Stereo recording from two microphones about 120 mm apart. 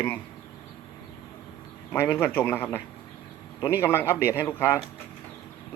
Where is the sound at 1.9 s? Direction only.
20° left (ahead or behind).